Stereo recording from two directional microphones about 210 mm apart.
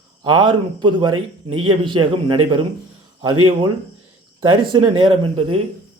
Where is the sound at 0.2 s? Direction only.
20° right (ahead or behind).